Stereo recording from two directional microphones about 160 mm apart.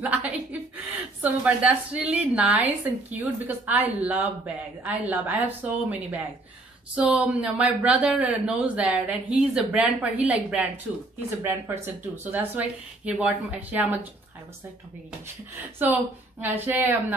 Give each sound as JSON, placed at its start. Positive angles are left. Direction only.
{"t": 0.0, "sound": "chuckle", "side_deg": -10}
{"t": 1.2, "sound": "speech", "side_deg": -10}
{"t": 15.8, "sound": "speech", "side_deg": -10}